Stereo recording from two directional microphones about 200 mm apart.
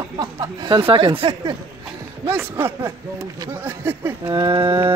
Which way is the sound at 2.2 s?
10° right (ahead or behind).